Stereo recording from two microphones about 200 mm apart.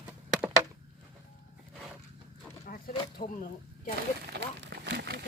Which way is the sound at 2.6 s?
45° left (ahead or behind).